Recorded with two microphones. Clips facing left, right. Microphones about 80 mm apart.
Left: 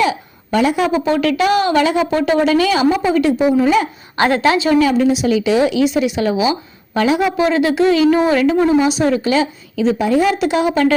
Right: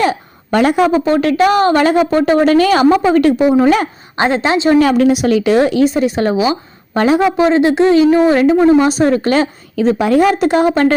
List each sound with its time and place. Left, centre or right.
0.0 s a woman's voice: right
4.2 s a woman's voice: right
4.7 s a woman's voice: right